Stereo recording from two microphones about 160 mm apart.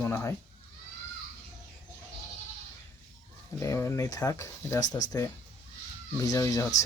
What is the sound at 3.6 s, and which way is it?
Speech, 15° left (ahead or behind).